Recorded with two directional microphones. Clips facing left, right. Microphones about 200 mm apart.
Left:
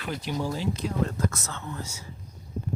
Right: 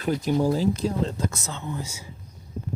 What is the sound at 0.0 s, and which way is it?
Speech, 45° right (ahead or behind).